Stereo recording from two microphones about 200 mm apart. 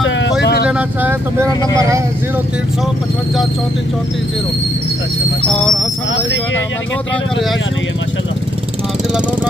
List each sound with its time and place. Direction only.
0.0 s vehicle: 60° left (ahead or behind)
0.7 s speech: 5° right (ahead or behind)
5.5 s speech: 5° left (ahead or behind)